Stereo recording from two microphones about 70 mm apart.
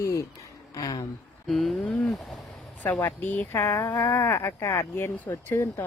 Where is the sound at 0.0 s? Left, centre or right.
Left.